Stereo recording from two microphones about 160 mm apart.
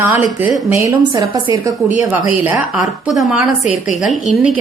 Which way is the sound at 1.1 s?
30° right (ahead or behind).